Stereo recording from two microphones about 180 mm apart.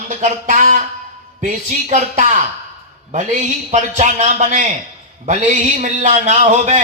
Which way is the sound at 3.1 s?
45° right (ahead or behind).